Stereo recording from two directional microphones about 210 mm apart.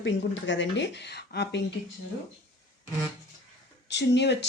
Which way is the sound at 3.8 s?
55° left (ahead or behind).